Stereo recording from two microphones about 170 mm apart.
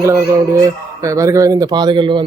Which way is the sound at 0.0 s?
15° right (ahead or behind).